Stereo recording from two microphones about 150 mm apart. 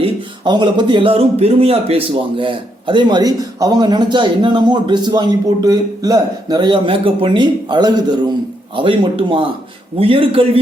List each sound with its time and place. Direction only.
0.0 s speech: 30° right (ahead or behind)